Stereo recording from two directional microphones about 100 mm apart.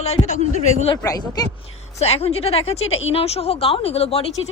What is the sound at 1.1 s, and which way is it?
Speech, 40° left (ahead or behind).